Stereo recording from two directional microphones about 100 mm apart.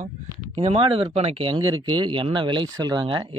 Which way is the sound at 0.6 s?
65° right (ahead or behind).